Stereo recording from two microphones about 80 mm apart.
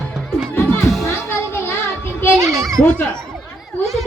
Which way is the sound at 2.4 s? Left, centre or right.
Right.